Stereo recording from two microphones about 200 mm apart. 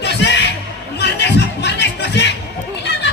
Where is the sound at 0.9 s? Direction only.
60° left (ahead or behind).